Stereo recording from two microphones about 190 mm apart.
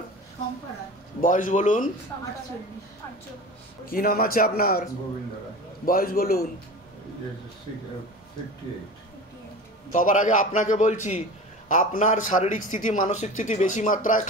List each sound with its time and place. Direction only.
1.2 s a man's voice: 45° left (ahead or behind)
3.8 s a man's voice: 50° left (ahead or behind)
5.9 s a man's voice: 50° left (ahead or behind)
9.9 s a man's voice: 45° left (ahead or behind)